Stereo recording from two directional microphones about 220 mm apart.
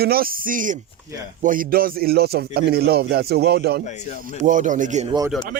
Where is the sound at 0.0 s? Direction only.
45° right (ahead or behind).